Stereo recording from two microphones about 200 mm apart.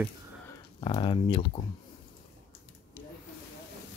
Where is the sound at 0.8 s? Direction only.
25° left (ahead or behind).